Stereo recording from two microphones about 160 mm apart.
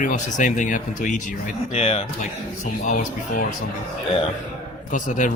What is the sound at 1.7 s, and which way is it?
Speech, 40° left (ahead or behind).